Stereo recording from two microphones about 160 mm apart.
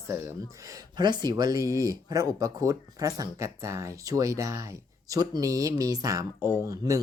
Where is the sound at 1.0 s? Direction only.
25° right (ahead or behind).